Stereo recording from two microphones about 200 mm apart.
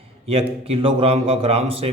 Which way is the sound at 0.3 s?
30° right (ahead or behind).